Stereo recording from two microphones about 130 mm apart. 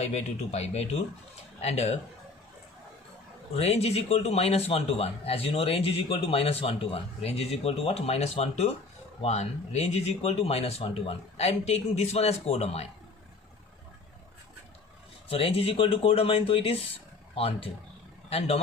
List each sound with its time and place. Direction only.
0.0 s speech: 55° left (ahead or behind)
3.5 s a man's voice: 55° left (ahead or behind)
15.3 s a man's voice: 45° left (ahead or behind)